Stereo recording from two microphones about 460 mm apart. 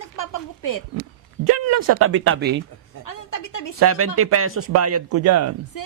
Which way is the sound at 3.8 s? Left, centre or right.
Right.